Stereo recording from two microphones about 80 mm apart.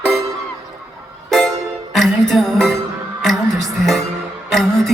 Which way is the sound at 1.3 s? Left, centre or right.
Centre.